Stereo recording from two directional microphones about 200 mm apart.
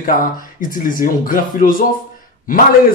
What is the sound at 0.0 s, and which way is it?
A man's voice, 45° left (ahead or behind).